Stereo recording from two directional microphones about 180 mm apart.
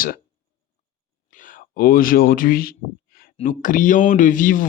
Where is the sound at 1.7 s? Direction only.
50° left (ahead or behind).